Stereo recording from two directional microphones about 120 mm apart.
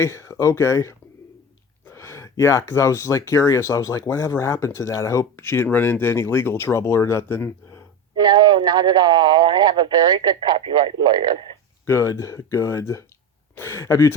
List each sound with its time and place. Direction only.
0.0 s speech: 25° left (ahead or behind)
8.1 s speech: 40° right (ahead or behind)
11.9 s speech: 25° left (ahead or behind)